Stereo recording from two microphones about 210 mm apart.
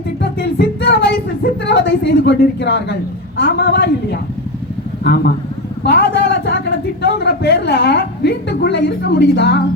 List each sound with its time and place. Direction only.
0.2 s a sound: 55° left (ahead or behind)
3.3 s a woman's voice: 55° left (ahead or behind)
5.8 s a man's voice: 55° left (ahead or behind)